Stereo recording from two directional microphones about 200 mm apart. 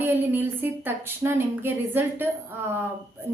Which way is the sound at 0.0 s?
10° right (ahead or behind).